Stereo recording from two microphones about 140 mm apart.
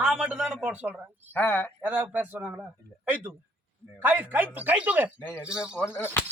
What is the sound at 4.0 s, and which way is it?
Music, 15° right (ahead or behind).